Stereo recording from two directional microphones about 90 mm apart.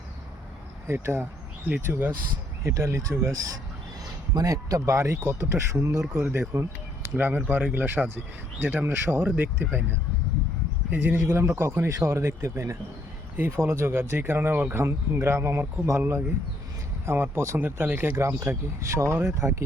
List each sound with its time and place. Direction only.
0.9 s speech: 25° right (ahead or behind)
2.6 s speech: 30° right (ahead or behind)
4.4 s speech: 40° right (ahead or behind); by 11.9 s 25° right (ahead or behind)
11.9 s speech: 35° right (ahead or behind)